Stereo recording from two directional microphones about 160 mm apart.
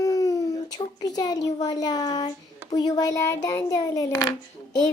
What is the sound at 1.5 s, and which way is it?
A child's voice, 25° left (ahead or behind).